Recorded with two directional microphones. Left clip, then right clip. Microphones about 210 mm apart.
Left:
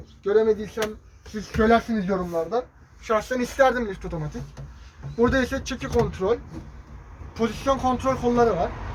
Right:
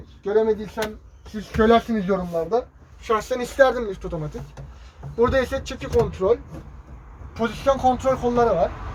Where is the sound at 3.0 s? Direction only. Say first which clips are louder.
Right 1 dB; 30° right (ahead or behind).